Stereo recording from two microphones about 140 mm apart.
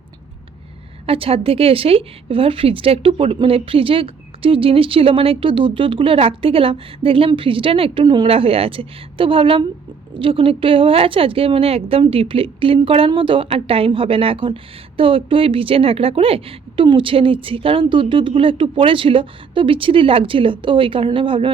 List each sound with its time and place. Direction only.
1.0 s a woman's voice: 40° right (ahead or behind)